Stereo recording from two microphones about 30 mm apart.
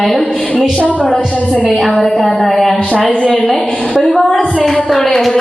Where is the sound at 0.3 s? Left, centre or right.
Centre.